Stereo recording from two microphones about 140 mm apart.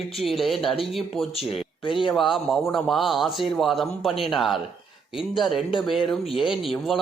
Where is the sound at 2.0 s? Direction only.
Centre (ahead or behind).